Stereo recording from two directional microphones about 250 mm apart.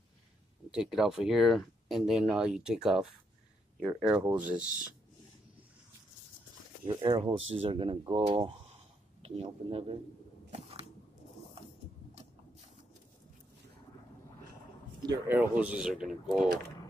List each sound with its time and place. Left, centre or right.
0.7 s speech: centre
6.8 s speech: centre
10.5 s a sound: right
15.0 s speech: centre